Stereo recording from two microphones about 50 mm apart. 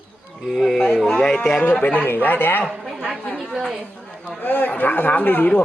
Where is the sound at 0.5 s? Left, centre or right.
Centre.